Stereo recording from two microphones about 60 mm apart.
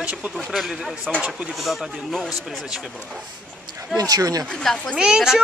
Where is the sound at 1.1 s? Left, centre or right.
Centre.